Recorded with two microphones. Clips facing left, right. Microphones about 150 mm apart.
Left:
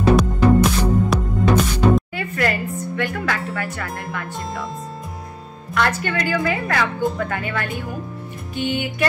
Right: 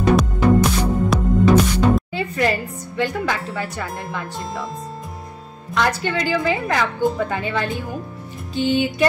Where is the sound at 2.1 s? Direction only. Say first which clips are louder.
Right 2 dB; 20° right (ahead or behind).